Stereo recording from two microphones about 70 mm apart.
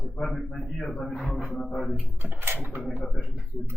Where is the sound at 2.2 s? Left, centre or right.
Right.